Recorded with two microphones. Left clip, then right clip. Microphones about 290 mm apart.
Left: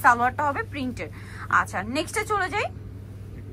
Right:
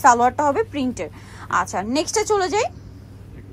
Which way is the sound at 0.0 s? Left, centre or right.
Centre.